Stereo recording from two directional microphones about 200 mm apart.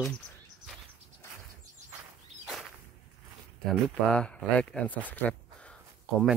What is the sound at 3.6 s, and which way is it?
Speech, 5° left (ahead or behind).